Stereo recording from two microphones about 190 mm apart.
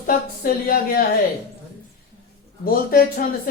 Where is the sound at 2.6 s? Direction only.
50° left (ahead or behind).